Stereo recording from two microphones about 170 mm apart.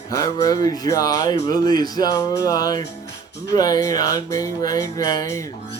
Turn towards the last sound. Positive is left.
turn(degrees=20)  # may be behind; listen again after turning